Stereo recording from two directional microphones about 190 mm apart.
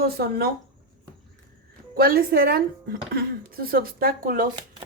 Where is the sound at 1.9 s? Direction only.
50° right (ahead or behind).